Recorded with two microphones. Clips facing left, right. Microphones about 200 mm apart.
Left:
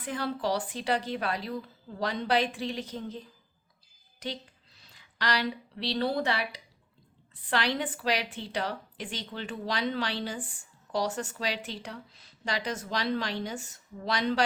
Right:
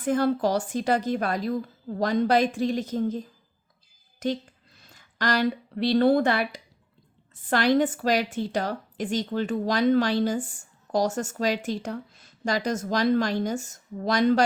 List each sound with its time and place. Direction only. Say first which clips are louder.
0.0 s a woman's voice: right 9 dB; 45° right (ahead or behind)